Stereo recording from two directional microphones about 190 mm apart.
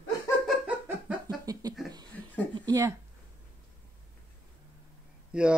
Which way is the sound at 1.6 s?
20° right (ahead or behind).